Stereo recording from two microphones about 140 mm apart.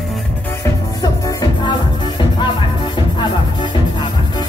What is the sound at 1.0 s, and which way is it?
Music, 30° left (ahead or behind).